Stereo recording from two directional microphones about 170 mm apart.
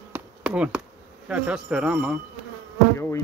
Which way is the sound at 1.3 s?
5° right (ahead or behind).